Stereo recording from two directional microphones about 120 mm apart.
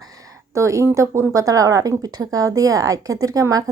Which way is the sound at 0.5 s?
25° right (ahead or behind).